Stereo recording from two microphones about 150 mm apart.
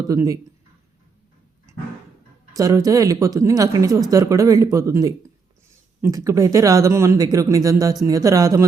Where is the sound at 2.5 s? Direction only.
25° right (ahead or behind).